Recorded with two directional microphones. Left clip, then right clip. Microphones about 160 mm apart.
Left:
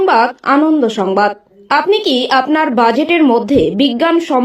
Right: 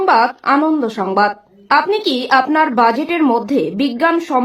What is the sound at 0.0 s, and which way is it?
A woman's voice, 25° left (ahead or behind).